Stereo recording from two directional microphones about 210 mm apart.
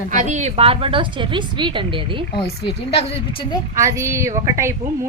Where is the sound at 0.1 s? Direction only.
35° right (ahead or behind).